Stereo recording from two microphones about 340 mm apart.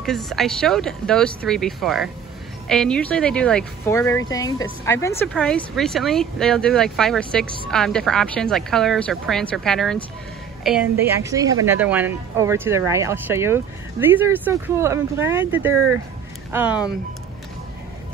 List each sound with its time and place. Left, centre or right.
0.0 s a woman's voice: centre